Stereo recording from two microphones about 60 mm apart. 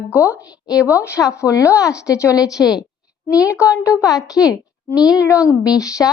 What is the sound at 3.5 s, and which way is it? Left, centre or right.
Speech, left.